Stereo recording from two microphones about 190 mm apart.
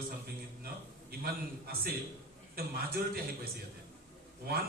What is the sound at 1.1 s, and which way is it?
A man's voice, 55° right (ahead or behind).